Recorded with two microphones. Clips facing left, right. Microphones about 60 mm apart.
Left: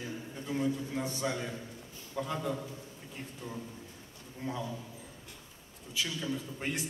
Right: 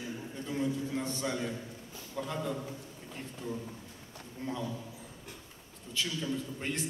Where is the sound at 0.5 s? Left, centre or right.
Centre.